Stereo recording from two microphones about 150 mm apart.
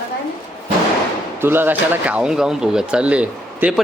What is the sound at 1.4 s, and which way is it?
Speech, 15° right (ahead or behind).